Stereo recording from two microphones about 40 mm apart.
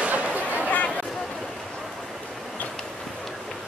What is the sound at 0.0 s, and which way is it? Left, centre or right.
Chatter, right.